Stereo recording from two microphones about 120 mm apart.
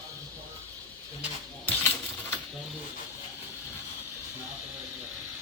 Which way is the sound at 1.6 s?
20° left (ahead or behind).